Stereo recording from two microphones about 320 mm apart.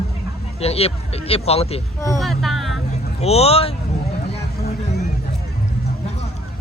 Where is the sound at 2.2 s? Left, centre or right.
Centre.